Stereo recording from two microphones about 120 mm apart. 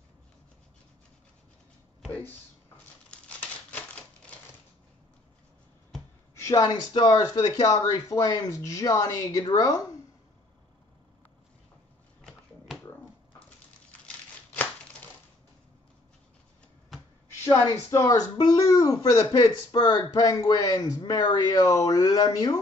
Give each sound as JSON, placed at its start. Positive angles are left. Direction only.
{"t": 3.1, "sound": "crumpling", "side_deg": 10}
{"t": 6.3, "sound": "a sound", "side_deg": 25}
{"t": 6.9, "sound": "speech", "side_deg": 35}
{"t": 14.0, "sound": "crumpling", "side_deg": 15}
{"t": 17.5, "sound": "speech", "side_deg": 30}
{"t": 21.0, "sound": "speech", "side_deg": 40}